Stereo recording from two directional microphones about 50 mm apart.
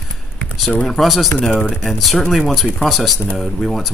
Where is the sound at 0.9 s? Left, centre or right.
Centre.